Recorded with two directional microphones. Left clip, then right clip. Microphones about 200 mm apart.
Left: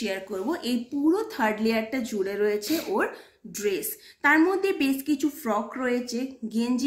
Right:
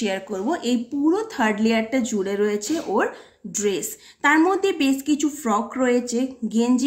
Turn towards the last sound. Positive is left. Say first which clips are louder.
# right 7 dB
turn(degrees=-55)  # may be behind; listen again after turning